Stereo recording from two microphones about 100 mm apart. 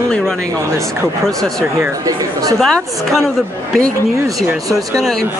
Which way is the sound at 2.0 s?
35° right (ahead or behind).